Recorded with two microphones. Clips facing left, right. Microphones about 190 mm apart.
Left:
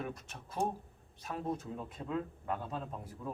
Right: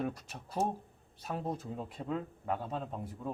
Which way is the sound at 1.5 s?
35° right (ahead or behind).